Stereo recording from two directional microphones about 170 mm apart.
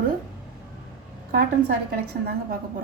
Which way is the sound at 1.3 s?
60° right (ahead or behind).